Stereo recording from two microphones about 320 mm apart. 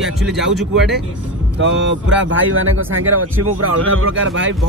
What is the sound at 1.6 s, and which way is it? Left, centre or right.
Speech, right.